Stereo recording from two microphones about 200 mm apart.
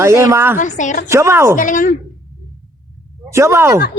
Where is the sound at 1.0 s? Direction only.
15° right (ahead or behind).